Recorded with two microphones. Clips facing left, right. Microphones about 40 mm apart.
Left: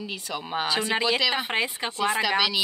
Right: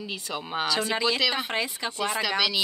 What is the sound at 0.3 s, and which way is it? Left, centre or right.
Speech, centre.